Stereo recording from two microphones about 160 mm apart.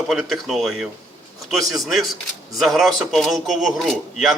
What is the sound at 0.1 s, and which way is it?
Speech, centre (ahead or behind).